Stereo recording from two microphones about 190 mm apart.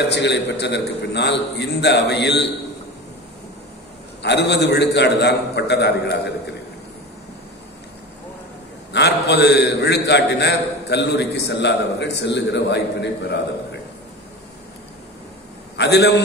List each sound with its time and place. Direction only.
0.0 s a man's voice: 65° left (ahead or behind)
4.2 s a man's voice: 65° left (ahead or behind)
8.9 s a man's voice: 60° left (ahead or behind)
15.8 s a man's voice: 60° left (ahead or behind)